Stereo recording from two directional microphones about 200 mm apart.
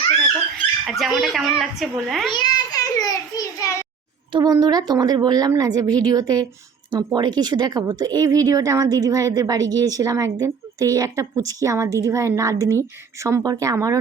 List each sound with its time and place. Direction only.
0.9 s a child's voice: centre (ahead or behind)
2.3 s a sound: 20° left (ahead or behind)
4.3 s a woman's voice: 20° right (ahead or behind)